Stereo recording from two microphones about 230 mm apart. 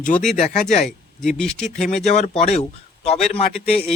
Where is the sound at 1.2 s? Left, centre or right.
Centre.